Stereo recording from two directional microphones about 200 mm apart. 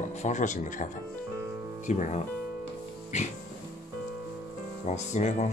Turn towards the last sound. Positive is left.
turn(degrees=35)  # may be behind; listen again after turning